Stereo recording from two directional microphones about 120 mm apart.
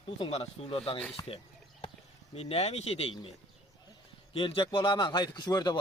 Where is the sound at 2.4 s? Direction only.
60° left (ahead or behind).